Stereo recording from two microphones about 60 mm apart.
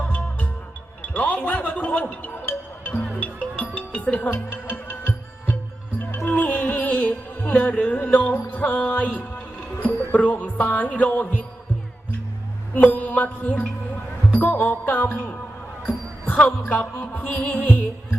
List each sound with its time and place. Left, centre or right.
0.0 s music: left
3.2 s music: left
12.7 s music: left
16.6 s music: left